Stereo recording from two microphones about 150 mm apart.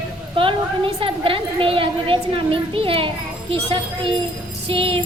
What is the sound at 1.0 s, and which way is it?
A woman's voice, 35° right (ahead or behind).